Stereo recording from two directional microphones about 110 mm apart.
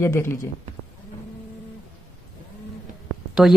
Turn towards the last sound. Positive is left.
turn(degrees=-5)  # may be behind; listen again after turning